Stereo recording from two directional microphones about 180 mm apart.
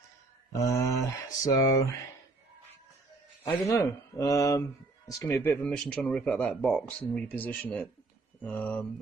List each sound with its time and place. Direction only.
0.5 s speech: 15° left (ahead or behind)
3.4 s speech: 15° left (ahead or behind)